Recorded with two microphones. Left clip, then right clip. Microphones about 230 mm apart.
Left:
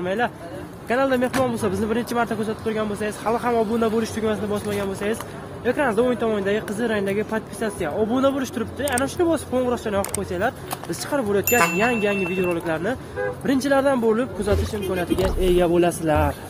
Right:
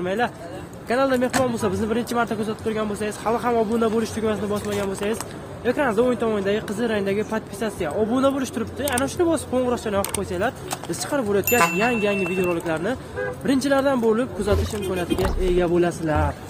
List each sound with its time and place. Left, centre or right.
0.0 s speech: centre
15.4 s speech: left